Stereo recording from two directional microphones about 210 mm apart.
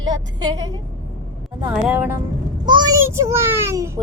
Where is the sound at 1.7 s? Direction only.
10° right (ahead or behind).